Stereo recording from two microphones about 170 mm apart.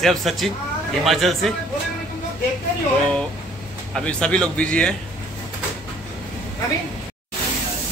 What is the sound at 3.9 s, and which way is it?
Speech, 5° left (ahead or behind).